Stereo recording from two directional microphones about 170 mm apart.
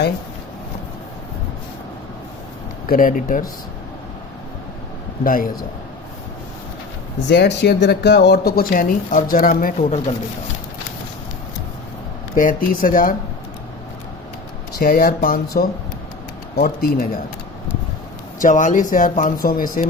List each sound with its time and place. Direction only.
2.8 s speech: 55° left (ahead or behind)
5.2 s speech: 55° left (ahead or behind)
7.3 s speech: 80° left; by 9.7 s 55° left (ahead or behind)
9.8 s speech: 35° left (ahead or behind)
12.4 s speech: 55° left (ahead or behind)
14.8 s speech: 60° left (ahead or behind)
18.4 s speech: 50° left (ahead or behind)